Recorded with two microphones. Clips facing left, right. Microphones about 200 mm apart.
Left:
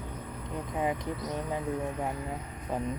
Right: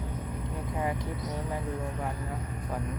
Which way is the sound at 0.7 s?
20° left (ahead or behind).